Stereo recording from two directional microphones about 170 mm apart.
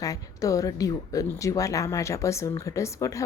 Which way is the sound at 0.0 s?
20° left (ahead or behind).